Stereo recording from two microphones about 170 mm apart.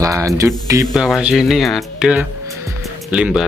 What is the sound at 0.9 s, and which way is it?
Speech, 5° right (ahead or behind).